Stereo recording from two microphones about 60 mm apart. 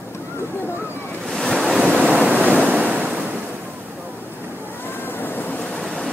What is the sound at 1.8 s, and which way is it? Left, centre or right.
Boat, right.